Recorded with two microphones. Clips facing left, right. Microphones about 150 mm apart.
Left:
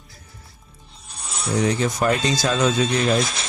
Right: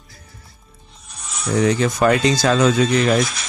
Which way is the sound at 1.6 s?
90° right.